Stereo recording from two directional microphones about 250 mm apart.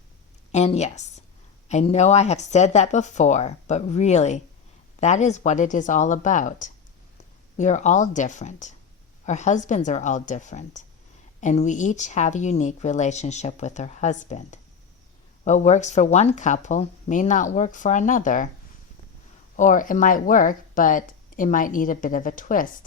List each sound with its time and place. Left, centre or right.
0.5 s speech: left
19.5 s speech: left